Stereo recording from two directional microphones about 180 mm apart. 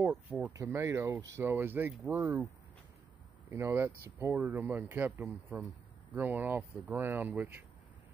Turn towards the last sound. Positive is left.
turn(degrees=-10)  # may be behind; listen again after turning